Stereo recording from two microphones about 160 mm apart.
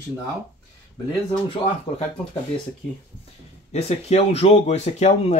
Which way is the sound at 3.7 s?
40° left (ahead or behind).